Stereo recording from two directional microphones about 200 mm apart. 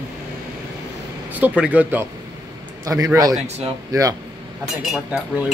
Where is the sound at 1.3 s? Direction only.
5° right (ahead or behind).